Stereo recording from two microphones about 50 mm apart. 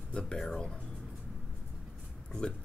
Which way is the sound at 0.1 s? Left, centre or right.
Centre.